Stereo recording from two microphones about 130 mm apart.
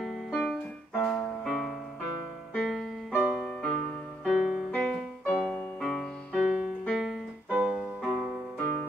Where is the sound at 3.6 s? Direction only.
5° left (ahead or behind).